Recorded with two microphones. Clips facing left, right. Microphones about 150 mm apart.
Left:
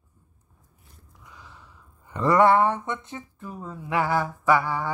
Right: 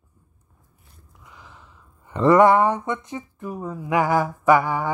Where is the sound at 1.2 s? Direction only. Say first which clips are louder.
Right 1 dB; 20° right (ahead or behind).